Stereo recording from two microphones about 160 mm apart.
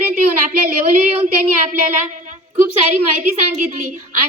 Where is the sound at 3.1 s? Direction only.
55° right (ahead or behind).